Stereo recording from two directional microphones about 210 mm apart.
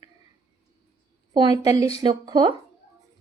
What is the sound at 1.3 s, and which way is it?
A woman's voice, 20° right (ahead or behind).